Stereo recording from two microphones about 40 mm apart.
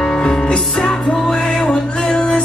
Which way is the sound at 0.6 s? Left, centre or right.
Centre.